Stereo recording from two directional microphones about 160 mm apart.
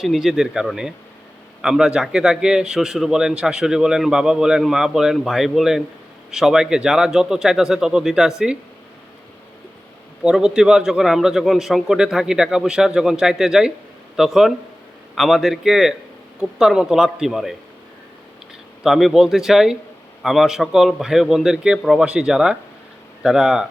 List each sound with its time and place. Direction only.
0.0 s a man's voice: centre (ahead or behind)
10.2 s a man's voice: 5° right (ahead or behind)
18.8 s a man's voice: centre (ahead or behind)